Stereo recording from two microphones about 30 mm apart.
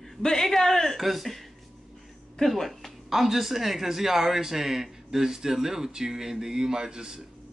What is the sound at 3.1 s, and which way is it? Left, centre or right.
Speech, centre.